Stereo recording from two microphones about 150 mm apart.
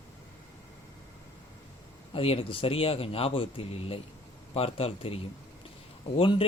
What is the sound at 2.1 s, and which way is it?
Speech, 40° left (ahead or behind).